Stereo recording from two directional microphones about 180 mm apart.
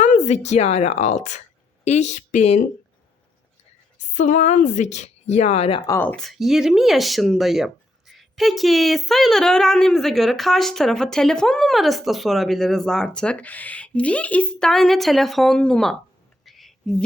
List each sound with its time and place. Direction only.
0.0 s speech: 40° left (ahead or behind)
3.9 s a woman's voice: 40° left (ahead or behind)
5.8 s speech: 15° left (ahead or behind)
16.4 s a sound: centre (ahead or behind)